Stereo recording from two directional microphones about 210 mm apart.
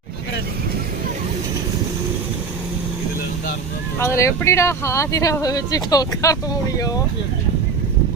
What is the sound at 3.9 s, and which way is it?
Speech, 15° left (ahead or behind).